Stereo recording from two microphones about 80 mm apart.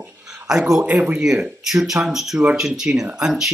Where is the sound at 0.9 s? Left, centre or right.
Centre.